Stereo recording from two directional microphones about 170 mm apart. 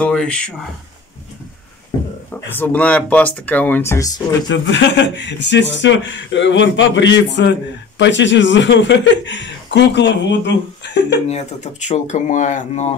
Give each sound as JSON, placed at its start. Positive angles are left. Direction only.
{"t": 0.0, "sound": "speech", "side_deg": 5}
{"t": 2.5, "sound": "speech", "side_deg": 10}
{"t": 4.5, "sound": "speech", "side_deg": 90}
{"t": 11.2, "sound": "speech", "side_deg": 40}